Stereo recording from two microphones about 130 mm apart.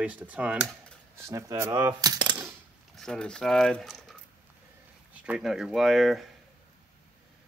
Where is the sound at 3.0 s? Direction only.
5° left (ahead or behind).